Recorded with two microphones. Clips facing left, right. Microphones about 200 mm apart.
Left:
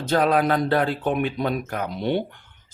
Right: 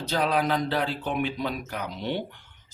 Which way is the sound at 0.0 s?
50° left (ahead or behind).